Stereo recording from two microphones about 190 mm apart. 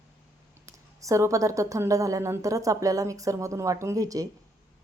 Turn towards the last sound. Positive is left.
turn(degrees=-20)  # may be behind; listen again after turning